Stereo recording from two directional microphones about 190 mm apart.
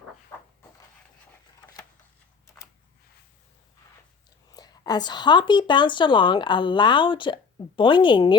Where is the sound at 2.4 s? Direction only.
15° left (ahead or behind).